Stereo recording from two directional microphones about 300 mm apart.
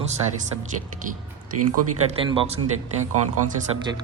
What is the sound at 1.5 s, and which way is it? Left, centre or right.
Speech, right.